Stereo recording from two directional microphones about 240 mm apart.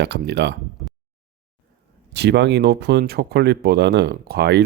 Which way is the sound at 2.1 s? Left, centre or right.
Right.